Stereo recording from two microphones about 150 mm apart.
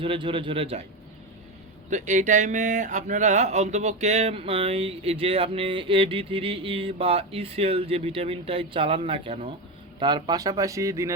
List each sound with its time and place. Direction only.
0.0 s speech: 35° right (ahead or behind)
1.9 s speech: 55° right (ahead or behind); by 11.1 s 20° right (ahead or behind)